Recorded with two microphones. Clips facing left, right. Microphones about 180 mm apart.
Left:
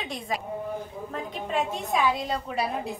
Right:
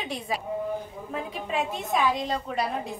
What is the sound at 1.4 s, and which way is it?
A woman's voice, centre (ahead or behind).